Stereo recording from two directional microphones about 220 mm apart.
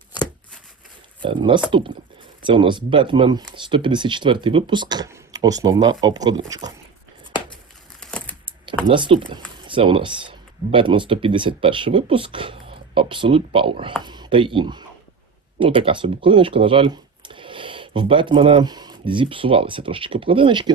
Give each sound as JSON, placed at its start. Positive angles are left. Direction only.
{"t": 1.2, "sound": "speech", "side_deg": -20}
{"t": 8.0, "sound": "a sound", "side_deg": 5}
{"t": 8.4, "sound": "computer keyboard", "side_deg": -20}
{"t": 9.6, "sound": "speech", "side_deg": -25}